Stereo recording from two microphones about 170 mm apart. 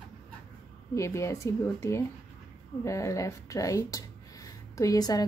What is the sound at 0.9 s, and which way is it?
Speech, 15° left (ahead or behind).